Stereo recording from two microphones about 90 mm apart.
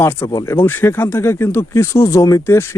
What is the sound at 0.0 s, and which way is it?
Speech, 30° left (ahead or behind).